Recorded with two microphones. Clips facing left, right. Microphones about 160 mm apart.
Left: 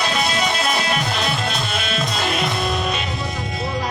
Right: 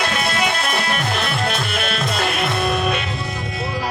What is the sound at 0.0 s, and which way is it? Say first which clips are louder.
Music: even; 55° right (ahead or behind).